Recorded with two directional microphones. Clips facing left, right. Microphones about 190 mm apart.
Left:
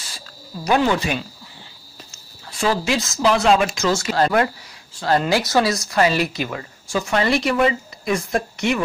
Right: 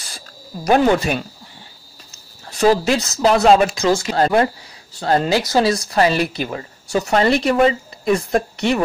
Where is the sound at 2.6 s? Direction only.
40° right (ahead or behind).